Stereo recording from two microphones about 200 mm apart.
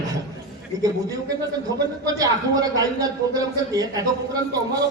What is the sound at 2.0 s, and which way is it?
A man's voice, 20° right (ahead or behind).